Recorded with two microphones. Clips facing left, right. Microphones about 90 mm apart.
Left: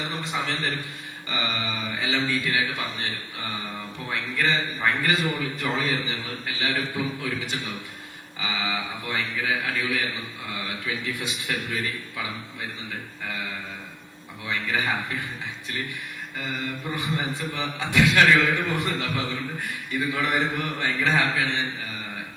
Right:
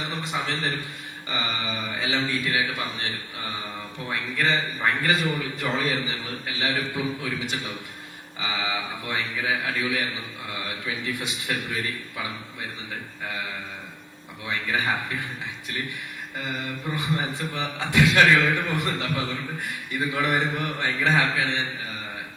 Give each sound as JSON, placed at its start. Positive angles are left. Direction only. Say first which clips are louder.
{"t": 0.4, "sound": "a man's voice", "louder": "even", "side_deg": -20}
{"t": 4.4, "sound": "a man's voice", "louder": "even", "side_deg": -20}
{"t": 8.5, "sound": "a man's voice", "louder": "even", "side_deg": -20}
{"t": 14.7, "sound": "a man's voice", "louder": "right 1 dB", "side_deg": -20}
{"t": 16.4, "sound": "a man's voice", "louder": "even", "side_deg": -20}
{"t": 18.6, "sound": "a man's voice", "louder": "even", "side_deg": 20}
{"t": 18.9, "sound": "a man's voice", "louder": "even", "side_deg": -20}